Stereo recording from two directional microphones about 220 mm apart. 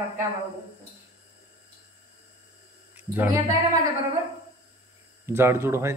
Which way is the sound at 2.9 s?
5° right (ahead or behind).